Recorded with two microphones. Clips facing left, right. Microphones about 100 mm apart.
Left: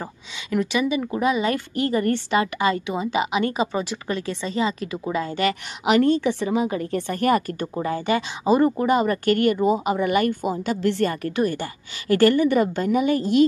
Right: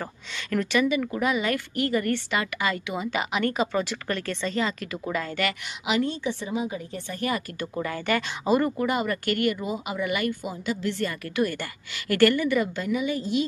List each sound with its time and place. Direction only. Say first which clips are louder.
0.0 s a woman's voice: left 1 dB; 15° left (ahead or behind)
5.9 s a woman's voice: left 8 dB; 70° left (ahead or behind)
7.1 s speech: left 8 dB; 55° left (ahead or behind)
7.6 s speech: left 4 dB; 25° left (ahead or behind); by 11.1 s 55° left (ahead or behind)
11.2 s speech: left 4 dB; 35° left (ahead or behind); by 13.5 s 55° left (ahead or behind)